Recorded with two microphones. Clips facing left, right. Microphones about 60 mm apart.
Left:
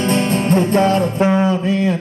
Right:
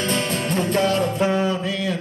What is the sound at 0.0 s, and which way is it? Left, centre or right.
Music, left.